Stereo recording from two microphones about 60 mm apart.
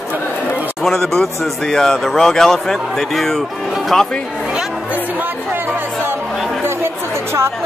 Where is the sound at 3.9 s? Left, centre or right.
Centre.